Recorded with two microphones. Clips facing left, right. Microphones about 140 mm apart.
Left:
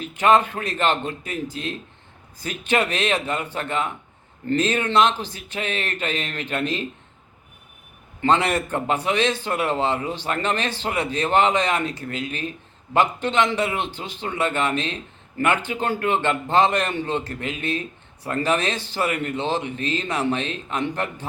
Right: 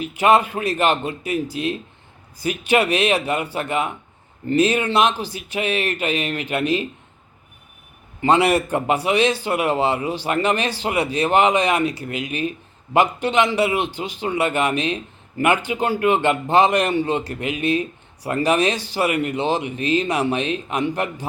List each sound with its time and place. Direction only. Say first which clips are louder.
0.0 s a man's voice: right 1 dB; 10° right (ahead or behind)
8.2 s a man's voice: right 4 dB; 10° right (ahead or behind)